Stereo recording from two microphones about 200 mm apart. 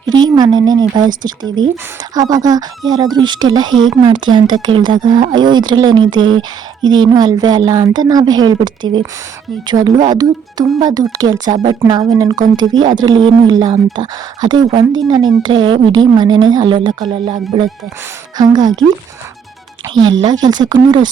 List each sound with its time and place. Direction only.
0.1 s speech: 20° right (ahead or behind)
19.9 s speech: 25° right (ahead or behind)